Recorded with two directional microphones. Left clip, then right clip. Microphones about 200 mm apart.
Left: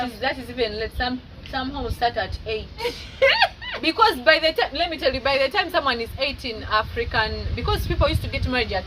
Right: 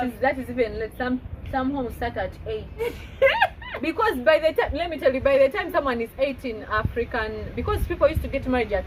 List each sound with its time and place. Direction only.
0.2 s a woman's voice: 15° left (ahead or behind)
3.2 s a sound: 5° right (ahead or behind)
3.8 s a woman's voice: 15° left (ahead or behind)